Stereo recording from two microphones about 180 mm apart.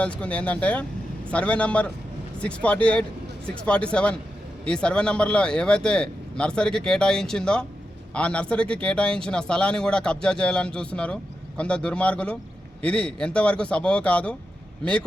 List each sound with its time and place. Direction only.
0.0 s a man's voice: 5° left (ahead or behind)